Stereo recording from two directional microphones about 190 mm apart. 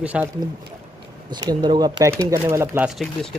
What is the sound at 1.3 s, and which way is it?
A man's voice, 20° right (ahead or behind).